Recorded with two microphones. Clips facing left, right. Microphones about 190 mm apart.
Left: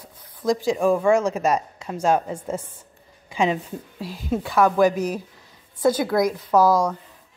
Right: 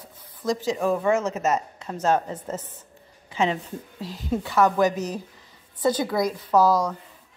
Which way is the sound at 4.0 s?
10° left (ahead or behind).